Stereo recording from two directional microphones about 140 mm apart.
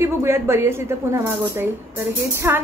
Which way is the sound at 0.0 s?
20° right (ahead or behind).